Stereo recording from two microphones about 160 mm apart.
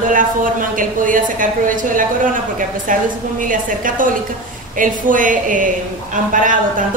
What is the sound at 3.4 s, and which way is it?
Speech, 55° right (ahead or behind).